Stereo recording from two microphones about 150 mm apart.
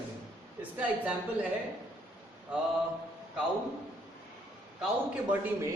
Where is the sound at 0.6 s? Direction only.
10° right (ahead or behind).